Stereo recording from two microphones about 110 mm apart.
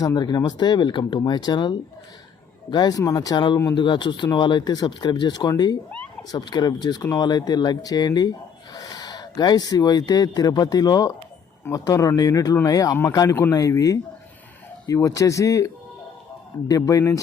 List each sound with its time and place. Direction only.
0.0 s speech: 40° left (ahead or behind)